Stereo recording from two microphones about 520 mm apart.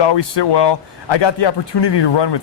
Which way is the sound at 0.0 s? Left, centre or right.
Left.